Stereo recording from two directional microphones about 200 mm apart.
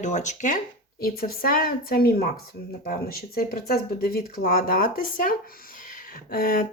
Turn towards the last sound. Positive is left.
turn(degrees=45)  # may be behind; listen again after turning